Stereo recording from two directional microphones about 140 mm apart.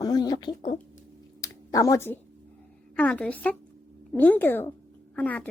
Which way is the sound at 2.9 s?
10° left (ahead or behind).